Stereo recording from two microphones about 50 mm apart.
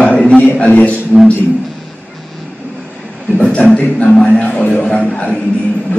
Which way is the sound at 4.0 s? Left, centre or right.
Left.